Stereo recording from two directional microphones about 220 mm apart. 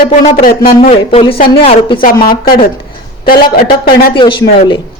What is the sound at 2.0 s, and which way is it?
Speech, 40° left (ahead or behind).